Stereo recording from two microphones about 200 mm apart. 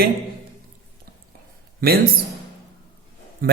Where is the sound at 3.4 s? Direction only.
45° right (ahead or behind).